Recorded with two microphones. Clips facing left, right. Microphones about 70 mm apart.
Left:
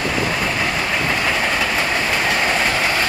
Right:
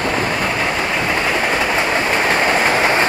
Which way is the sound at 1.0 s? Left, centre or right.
Centre.